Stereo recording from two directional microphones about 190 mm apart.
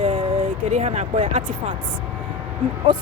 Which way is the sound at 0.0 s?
30° right (ahead or behind).